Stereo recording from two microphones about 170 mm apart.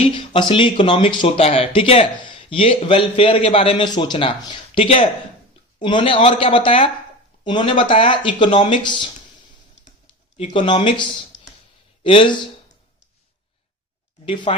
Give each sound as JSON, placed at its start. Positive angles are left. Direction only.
{"t": 0.1, "sound": "speech", "side_deg": 30}
{"t": 10.3, "sound": "speech", "side_deg": 35}
{"t": 12.0, "sound": "speech", "side_deg": 30}
{"t": 14.5, "sound": "speech", "side_deg": 35}